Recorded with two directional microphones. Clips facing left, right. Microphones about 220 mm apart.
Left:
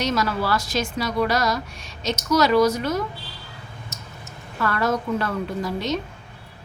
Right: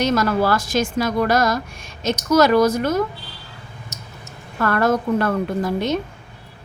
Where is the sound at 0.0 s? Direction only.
50° right (ahead or behind).